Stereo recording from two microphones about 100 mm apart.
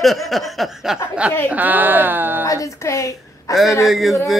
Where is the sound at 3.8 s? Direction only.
Centre (ahead or behind).